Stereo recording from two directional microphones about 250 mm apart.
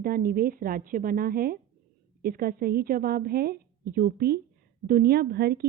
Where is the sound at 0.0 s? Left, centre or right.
Right.